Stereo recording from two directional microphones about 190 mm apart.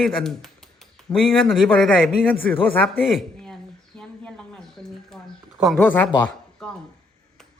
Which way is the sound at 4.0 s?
5° left (ahead or behind).